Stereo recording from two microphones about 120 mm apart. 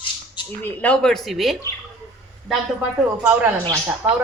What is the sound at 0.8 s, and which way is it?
Speech, 5° left (ahead or behind).